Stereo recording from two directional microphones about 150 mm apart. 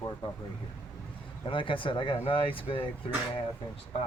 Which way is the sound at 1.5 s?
35° left (ahead or behind).